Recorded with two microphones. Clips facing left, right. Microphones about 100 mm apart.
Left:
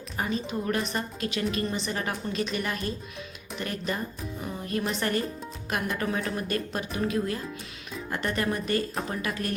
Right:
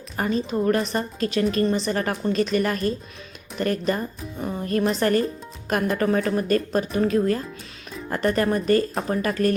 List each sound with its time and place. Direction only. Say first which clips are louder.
0.2 s a woman's voice: right 7 dB; 40° right (ahead or behind)
4.4 s music: right 7 dB; 45° right (ahead or behind)
4.8 s a woman's voice: right 8 dB; 35° right (ahead or behind)